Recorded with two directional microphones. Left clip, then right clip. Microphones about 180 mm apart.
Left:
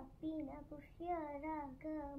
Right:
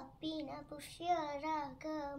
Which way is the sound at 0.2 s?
25° right (ahead or behind).